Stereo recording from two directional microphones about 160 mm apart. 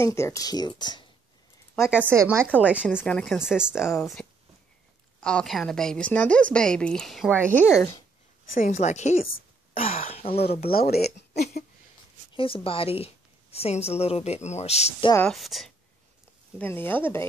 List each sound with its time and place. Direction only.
0.0 s speech: 15° left (ahead or behind)
2.0 s a woman's voice: 15° right (ahead or behind)
3.0 s speech: 5° left (ahead or behind)
3.3 s a woman's voice: 5° right (ahead or behind)
4.2 s a sound: 5° left (ahead or behind)
5.2 s a woman's voice: 5° left (ahead or behind)
7.5 s speech: 15° left (ahead or behind)
8.5 s a woman's voice: 45° left (ahead or behind)
10.6 s speech: 70° left (ahead or behind)
11.3 s a woman's voice: 45° left (ahead or behind)
12.3 s a woman's voice: 35° left (ahead or behind)
15.3 s a woman's voice: centre (ahead or behind)
16.5 s speech: 10° left (ahead or behind)